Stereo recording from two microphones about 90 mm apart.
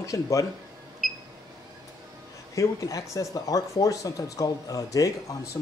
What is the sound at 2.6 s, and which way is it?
Speech, 40° left (ahead or behind).